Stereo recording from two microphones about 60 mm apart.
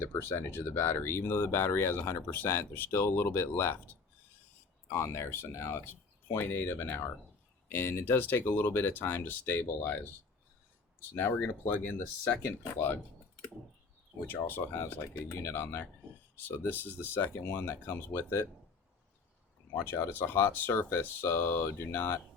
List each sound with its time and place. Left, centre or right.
0.0 s speech: left
5.1 s speech: left
11.1 s speech: left
12.6 s speech: left
14.3 s speech: left
19.9 s speech: left